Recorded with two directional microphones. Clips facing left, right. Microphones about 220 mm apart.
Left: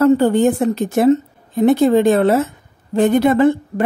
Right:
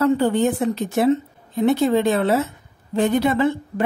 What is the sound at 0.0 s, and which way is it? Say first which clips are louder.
A woman's voice: left 5 dB; 45° left (ahead or behind).